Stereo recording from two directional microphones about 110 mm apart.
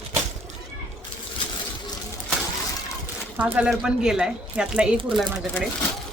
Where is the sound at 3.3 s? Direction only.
15° right (ahead or behind).